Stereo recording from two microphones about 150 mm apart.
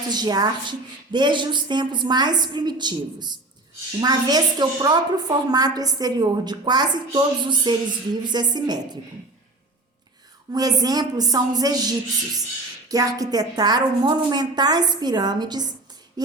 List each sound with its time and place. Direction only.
0.1 s a woman's voice: 25° right (ahead or behind)
10.5 s a woman's voice: 25° right (ahead or behind)